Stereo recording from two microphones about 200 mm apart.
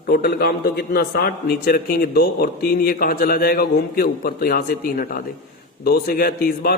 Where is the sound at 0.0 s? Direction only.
50° left (ahead or behind).